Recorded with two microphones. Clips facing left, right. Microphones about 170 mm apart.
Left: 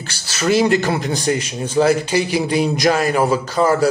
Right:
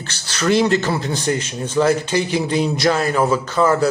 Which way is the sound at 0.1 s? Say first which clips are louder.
Even; 10° left (ahead or behind).